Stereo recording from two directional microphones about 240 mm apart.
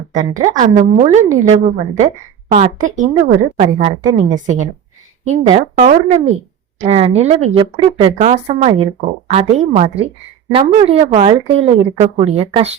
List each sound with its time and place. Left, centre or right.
0.1 s a woman's voice: right
5.2 s speech: right